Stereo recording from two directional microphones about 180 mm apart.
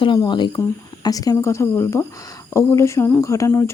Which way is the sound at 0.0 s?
25° left (ahead or behind).